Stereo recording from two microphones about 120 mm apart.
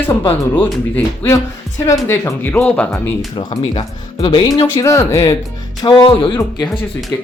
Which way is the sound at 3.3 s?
45° left (ahead or behind).